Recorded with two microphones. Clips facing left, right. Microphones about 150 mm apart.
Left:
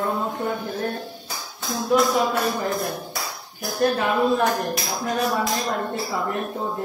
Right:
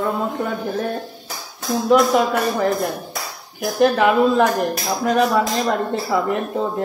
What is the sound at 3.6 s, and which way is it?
Speech, 90° right.